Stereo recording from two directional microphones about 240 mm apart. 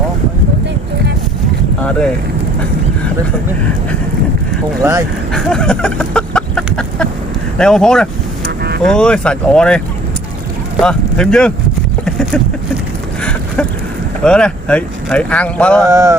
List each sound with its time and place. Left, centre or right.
4.8 s speech: centre
5.3 s chicken: centre
7.6 s speech: centre
8.4 s vehicle: right
8.8 s speech: centre
14.3 s speech: centre
15.9 s speech: centre